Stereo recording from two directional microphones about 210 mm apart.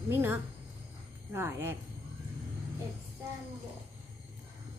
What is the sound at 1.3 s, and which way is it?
Speech, 10° right (ahead or behind).